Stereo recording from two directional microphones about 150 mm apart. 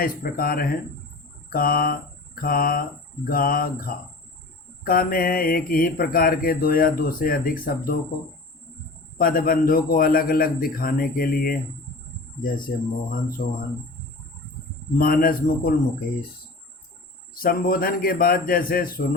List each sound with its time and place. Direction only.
0.0 s speech: 75° left (ahead or behind)
9.1 s speech: 70° left (ahead or behind)
13.4 s speech: 80° left
14.9 s speech: 75° left (ahead or behind)
17.3 s speech: 70° left (ahead or behind)